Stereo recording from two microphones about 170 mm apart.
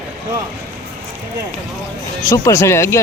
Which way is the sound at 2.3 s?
15° left (ahead or behind).